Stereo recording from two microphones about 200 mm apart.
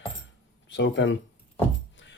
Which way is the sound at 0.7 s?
65° left (ahead or behind).